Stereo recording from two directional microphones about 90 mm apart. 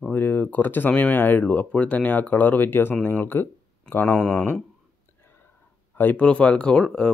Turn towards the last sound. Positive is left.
turn(degrees=10)  # may be behind; listen again after turning